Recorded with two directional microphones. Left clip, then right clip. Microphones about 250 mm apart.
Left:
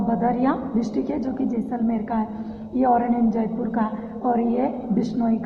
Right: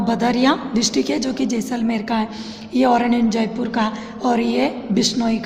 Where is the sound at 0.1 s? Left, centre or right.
Right.